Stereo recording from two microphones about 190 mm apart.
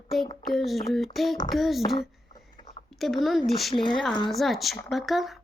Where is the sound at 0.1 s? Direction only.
Centre (ahead or behind).